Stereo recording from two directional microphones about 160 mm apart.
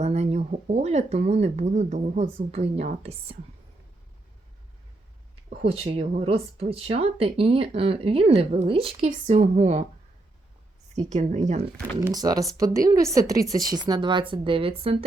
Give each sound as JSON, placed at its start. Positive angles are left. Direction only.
{"t": 0.0, "sound": "speech", "side_deg": -45}
{"t": 5.6, "sound": "speech", "side_deg": -35}
{"t": 10.9, "sound": "speech", "side_deg": -50}
{"t": 11.9, "sound": "speech", "side_deg": -20}